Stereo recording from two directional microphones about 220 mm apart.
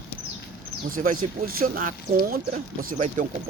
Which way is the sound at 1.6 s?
40° right (ahead or behind).